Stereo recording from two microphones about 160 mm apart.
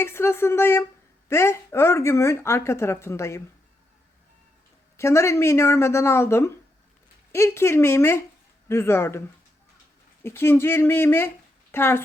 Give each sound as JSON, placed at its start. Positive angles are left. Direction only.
{"t": 0.0, "sound": "a woman's voice", "side_deg": 15}
{"t": 4.9, "sound": "a woman's voice", "side_deg": 15}